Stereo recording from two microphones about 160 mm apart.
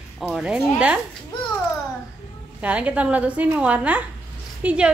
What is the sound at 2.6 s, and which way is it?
A woman's voice, 10° right (ahead or behind).